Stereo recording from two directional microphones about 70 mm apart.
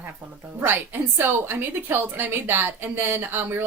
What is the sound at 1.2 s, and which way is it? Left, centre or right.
A woman's voice, right.